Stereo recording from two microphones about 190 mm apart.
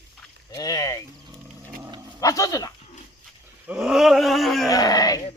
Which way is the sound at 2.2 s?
15° left (ahead or behind).